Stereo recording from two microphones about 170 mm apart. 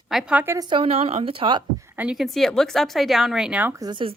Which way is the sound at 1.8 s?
10° right (ahead or behind).